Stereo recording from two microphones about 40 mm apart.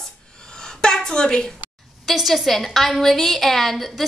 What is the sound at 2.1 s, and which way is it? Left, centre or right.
A woman's voice, centre.